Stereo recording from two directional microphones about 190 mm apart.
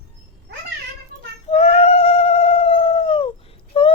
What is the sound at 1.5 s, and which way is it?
Cat, 35° left (ahead or behind).